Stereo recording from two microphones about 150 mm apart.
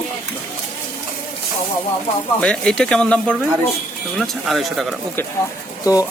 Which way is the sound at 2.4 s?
5° left (ahead or behind).